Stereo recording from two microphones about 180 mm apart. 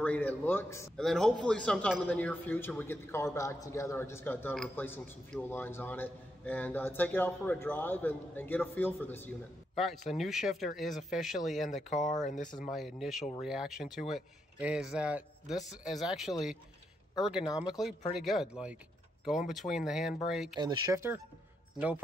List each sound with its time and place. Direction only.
0.0 s a man's voice: 10° left (ahead or behind)
0.9 s a man's voice: centre (ahead or behind)
9.8 s speech: centre (ahead or behind)
11.6 s speech: 40° left (ahead or behind)
12.7 s speech: centre (ahead or behind)
20.5 s speech: 25° right (ahead or behind); by 22.0 s 10° right (ahead or behind)